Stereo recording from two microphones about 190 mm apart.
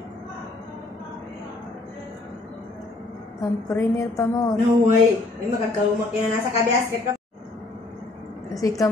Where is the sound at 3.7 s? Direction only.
15° left (ahead or behind).